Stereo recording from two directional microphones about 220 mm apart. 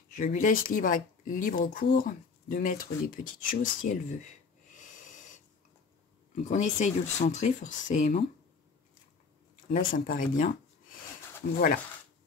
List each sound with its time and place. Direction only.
0.1 s speech: 35° left (ahead or behind)
4.7 s wheeze: 35° left (ahead or behind)
6.4 s speech: 35° left (ahead or behind)
9.7 s speech: 40° left (ahead or behind)